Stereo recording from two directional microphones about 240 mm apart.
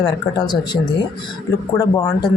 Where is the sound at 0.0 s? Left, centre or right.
Centre.